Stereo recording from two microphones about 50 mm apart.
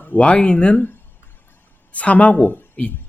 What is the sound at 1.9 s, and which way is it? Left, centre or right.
A woman's voice, left.